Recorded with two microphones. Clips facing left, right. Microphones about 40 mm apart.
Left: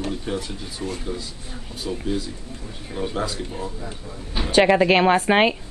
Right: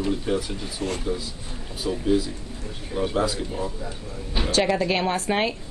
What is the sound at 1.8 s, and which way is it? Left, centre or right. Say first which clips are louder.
Speech: right 4 dB; centre.